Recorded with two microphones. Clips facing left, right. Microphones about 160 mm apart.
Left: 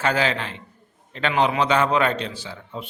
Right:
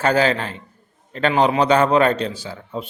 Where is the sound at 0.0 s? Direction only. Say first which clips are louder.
Right 5 dB; 40° right (ahead or behind).